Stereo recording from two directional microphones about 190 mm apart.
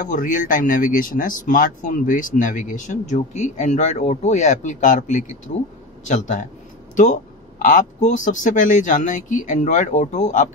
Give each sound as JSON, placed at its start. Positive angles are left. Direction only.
{"t": 0.0, "sound": "speech", "side_deg": 45}